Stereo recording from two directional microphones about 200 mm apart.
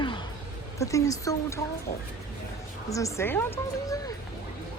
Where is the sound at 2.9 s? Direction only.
15° left (ahead or behind).